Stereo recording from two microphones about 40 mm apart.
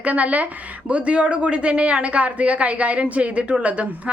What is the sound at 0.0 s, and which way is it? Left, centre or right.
A woman's voice, right.